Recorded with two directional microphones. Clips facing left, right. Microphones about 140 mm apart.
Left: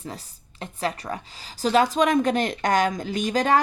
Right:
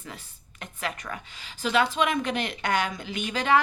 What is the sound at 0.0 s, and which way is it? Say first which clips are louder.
Speech: left 6 dB; 35° left (ahead or behind).